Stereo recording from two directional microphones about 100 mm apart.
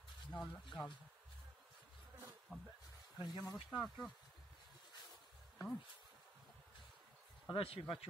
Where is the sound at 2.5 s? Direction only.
Centre (ahead or behind).